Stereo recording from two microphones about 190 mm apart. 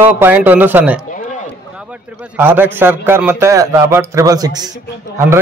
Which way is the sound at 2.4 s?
10° right (ahead or behind).